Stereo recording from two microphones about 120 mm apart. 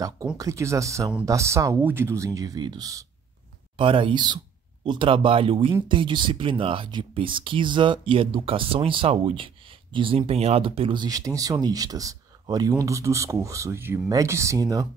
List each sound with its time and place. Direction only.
0.4 s speech: 25° right (ahead or behind)
3.7 s speech: 45° right (ahead or behind); by 14.9 s 30° right (ahead or behind)